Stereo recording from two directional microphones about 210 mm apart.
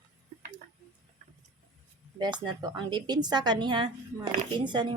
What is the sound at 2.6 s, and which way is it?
A woman's voice, 20° right (ahead or behind).